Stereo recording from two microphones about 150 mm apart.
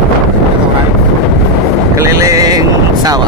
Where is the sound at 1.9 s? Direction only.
20° right (ahead or behind).